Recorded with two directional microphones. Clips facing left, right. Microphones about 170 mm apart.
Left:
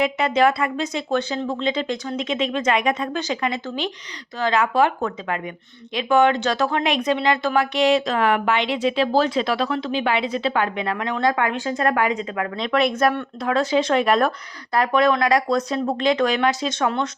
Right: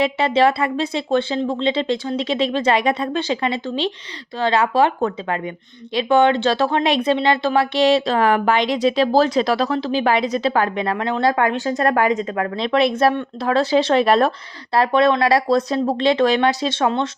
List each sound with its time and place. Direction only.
0.0 s speech: 30° right (ahead or behind)